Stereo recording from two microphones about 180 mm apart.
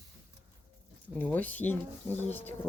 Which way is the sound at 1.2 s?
10° left (ahead or behind).